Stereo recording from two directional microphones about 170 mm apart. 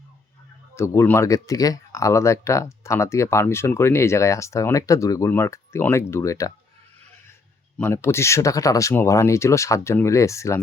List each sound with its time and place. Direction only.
0.8 s speech: 15° left (ahead or behind)
7.8 s speech: 15° left (ahead or behind)